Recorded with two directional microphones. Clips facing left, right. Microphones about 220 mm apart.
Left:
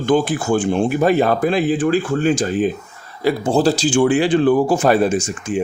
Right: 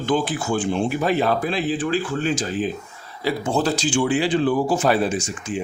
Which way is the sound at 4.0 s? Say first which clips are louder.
Left 4 dB; 50° left (ahead or behind).